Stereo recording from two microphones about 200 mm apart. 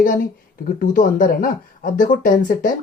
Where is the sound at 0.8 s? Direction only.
45° left (ahead or behind).